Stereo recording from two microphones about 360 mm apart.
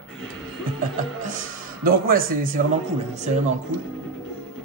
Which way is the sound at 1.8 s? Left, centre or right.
Right.